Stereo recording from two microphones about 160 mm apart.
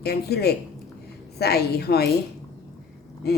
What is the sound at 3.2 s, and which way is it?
Speech, 80° left.